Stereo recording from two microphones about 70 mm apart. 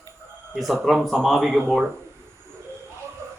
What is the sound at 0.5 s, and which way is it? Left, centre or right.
Speech, centre.